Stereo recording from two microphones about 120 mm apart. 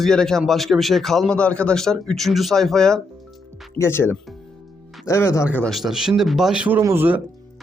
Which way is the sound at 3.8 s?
20° left (ahead or behind).